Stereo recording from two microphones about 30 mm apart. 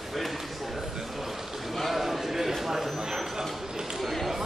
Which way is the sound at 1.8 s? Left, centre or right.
Centre.